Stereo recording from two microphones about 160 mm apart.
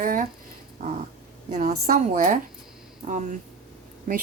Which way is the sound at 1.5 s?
55° right (ahead or behind).